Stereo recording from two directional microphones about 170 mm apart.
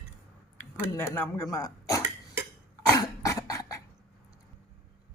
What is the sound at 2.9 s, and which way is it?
Cough, 20° left (ahead or behind).